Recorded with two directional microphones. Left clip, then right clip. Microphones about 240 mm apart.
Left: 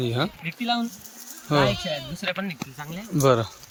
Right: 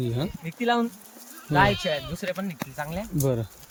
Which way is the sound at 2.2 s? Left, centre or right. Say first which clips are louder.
Left 2 dB; centre.